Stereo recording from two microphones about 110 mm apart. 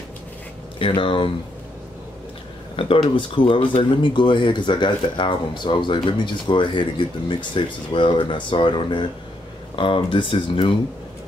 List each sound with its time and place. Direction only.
0.7 s speech: 55° left (ahead or behind)
2.7 s speech: 55° left (ahead or behind)